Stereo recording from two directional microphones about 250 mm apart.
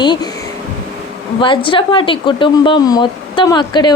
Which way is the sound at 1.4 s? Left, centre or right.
Centre.